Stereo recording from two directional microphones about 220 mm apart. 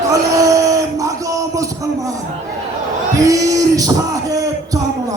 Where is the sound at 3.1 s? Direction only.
15° right (ahead or behind).